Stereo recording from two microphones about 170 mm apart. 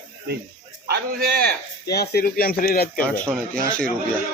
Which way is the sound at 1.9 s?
70° left (ahead or behind).